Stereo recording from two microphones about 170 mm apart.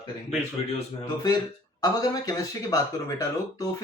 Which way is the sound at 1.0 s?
25° left (ahead or behind).